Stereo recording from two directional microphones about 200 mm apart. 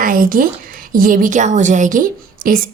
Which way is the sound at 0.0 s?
45° right (ahead or behind).